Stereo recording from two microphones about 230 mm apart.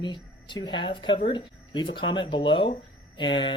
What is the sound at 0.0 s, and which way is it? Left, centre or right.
Speech, centre.